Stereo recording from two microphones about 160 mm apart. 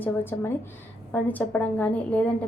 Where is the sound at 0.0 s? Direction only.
15° left (ahead or behind).